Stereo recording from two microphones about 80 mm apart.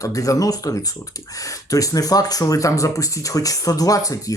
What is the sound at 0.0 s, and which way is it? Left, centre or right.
Speech, left.